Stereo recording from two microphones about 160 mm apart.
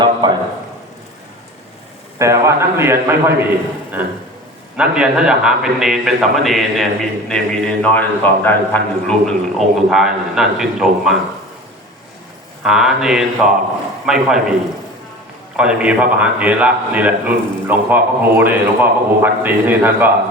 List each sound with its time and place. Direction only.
0.0 s a sound: 30° right (ahead or behind)
2.1 s a man's voice: 20° right (ahead or behind)
4.8 s a man's voice: 5° right (ahead or behind)
12.6 s a man's voice: 5° right (ahead or behind)
15.5 s a man's voice: 5° right (ahead or behind)